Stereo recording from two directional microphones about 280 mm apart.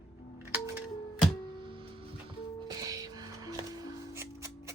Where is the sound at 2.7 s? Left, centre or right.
Centre.